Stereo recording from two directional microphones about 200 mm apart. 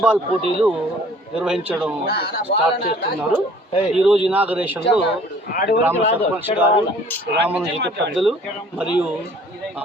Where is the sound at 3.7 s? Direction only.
30° left (ahead or behind).